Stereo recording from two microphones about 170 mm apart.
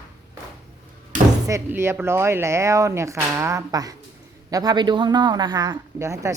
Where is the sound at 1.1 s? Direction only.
50° right (ahead or behind).